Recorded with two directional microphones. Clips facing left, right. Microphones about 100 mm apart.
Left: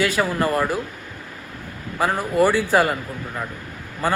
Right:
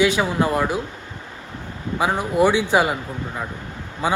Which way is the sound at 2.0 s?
5° right (ahead or behind).